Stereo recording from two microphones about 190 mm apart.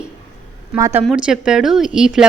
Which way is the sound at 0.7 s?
15° right (ahead or behind).